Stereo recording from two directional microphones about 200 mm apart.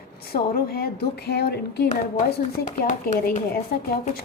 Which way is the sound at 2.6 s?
40° left (ahead or behind).